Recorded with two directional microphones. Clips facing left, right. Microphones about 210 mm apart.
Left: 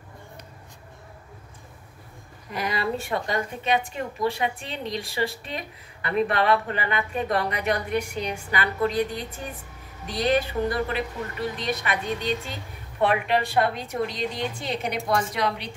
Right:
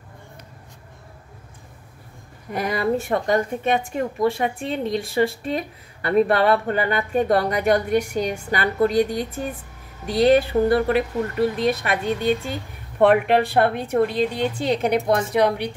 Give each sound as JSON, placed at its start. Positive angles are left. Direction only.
{"t": 2.5, "sound": "a woman's voice", "side_deg": -50}